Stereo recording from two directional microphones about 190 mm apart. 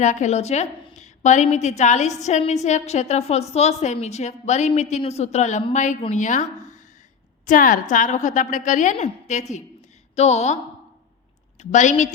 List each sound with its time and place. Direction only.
0.0 s a woman's voice: 40° left (ahead or behind)
11.6 s a woman's voice: 40° left (ahead or behind)